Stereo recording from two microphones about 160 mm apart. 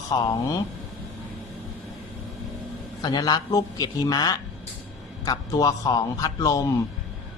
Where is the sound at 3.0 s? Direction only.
25° left (ahead or behind).